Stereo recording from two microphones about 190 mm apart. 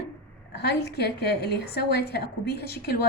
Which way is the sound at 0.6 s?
60° left (ahead or behind).